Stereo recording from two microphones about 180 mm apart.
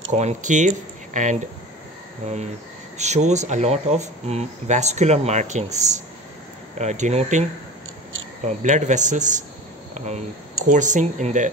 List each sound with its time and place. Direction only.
0.1 s speech: 40° right (ahead or behind)
8.5 s speech: 40° right (ahead or behind)
10.7 s speech: 45° right (ahead or behind)